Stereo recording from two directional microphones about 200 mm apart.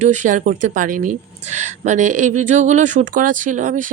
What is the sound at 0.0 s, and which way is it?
Speech, 35° right (ahead or behind).